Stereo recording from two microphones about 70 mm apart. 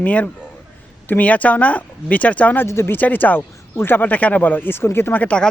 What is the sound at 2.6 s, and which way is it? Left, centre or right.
Speech, left.